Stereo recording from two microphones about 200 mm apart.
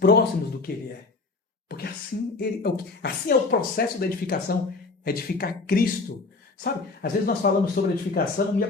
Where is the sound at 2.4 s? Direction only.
50° left (ahead or behind).